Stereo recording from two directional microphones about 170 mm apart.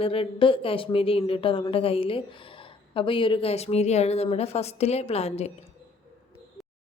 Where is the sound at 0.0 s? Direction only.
35° left (ahead or behind).